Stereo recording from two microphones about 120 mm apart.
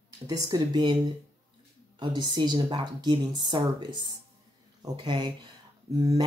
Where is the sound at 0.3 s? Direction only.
30° right (ahead or behind).